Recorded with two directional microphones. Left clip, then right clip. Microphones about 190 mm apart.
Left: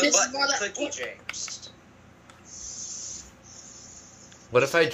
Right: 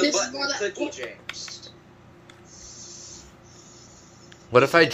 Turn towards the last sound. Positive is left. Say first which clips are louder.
# right 4 dB
turn(degrees=-30)  # may be behind; listen again after turning